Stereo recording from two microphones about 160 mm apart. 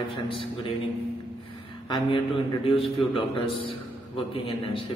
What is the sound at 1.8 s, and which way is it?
A man's voice, 30° left (ahead or behind).